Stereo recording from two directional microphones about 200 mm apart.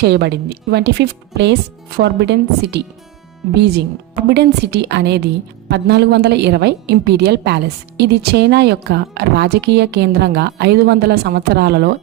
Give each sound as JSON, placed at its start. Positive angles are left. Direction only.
{"t": 0.0, "sound": "a woman's voice", "side_deg": -55}